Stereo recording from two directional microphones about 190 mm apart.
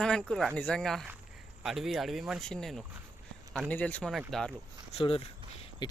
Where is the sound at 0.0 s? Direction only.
5° left (ahead or behind).